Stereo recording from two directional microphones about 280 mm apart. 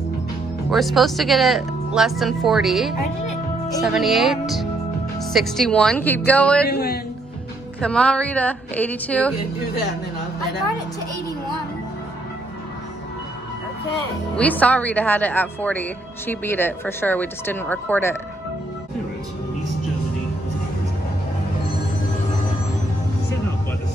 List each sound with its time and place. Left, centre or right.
0.7 s speech: centre
6.7 s speech: left
7.8 s speech: centre
14.3 s speech: centre